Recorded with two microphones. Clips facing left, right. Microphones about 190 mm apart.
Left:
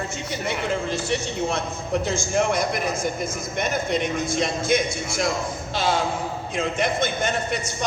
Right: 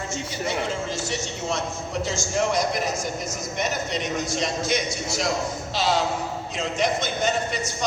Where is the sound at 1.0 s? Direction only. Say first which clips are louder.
Left 4 dB; 55° left (ahead or behind).